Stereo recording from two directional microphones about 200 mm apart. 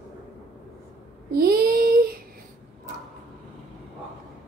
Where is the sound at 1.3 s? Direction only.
50° right (ahead or behind).